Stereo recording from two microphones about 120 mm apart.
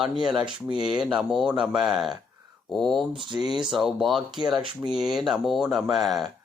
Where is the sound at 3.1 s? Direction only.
40° right (ahead or behind).